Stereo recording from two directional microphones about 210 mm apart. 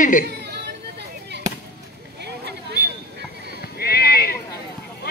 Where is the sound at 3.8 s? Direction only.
50° left (ahead or behind).